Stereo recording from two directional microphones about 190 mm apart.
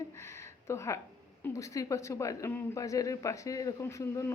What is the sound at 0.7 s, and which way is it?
Speech, 15° left (ahead or behind).